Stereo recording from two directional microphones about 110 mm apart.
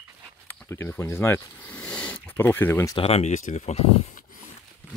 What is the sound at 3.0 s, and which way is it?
Speech, 65° left (ahead or behind).